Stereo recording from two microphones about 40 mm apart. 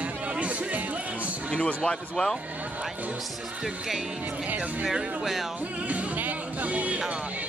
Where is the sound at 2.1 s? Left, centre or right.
Centre.